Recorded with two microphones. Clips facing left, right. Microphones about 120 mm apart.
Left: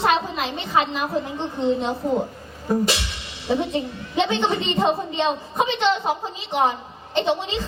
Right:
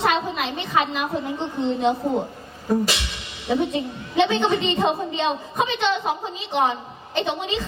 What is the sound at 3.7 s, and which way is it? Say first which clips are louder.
Speech: right 1 dB; 30° left (ahead or behind).